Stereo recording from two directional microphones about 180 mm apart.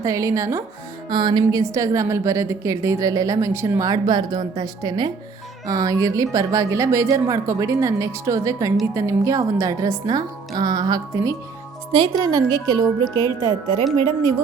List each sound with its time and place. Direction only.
0.0 s a woman's voice: 20° right (ahead or behind)